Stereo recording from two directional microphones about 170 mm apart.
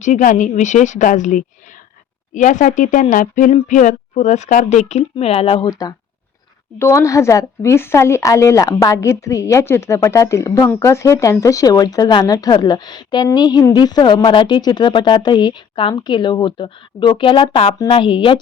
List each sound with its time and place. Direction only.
0.0 s speech: 50° left (ahead or behind); by 5.9 s 30° left (ahead or behind)
6.7 s a woman's voice: 15° left (ahead or behind)